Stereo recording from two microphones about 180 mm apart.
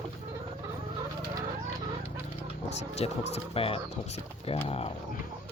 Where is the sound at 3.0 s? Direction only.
35° left (ahead or behind).